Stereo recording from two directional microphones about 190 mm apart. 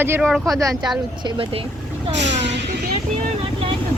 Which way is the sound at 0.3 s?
Centre (ahead or behind).